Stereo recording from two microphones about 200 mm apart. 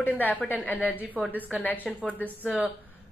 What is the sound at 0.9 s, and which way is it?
Speech, 5° right (ahead or behind).